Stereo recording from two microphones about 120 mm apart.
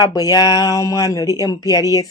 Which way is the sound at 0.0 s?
35° left (ahead or behind).